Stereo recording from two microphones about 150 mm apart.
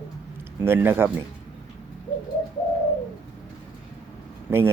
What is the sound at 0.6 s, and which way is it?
Speech, 15° right (ahead or behind).